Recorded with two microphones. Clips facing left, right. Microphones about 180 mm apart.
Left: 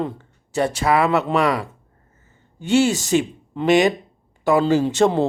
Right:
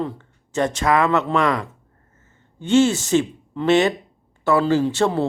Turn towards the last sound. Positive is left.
turn(degrees=20)  # may be behind; listen again after turning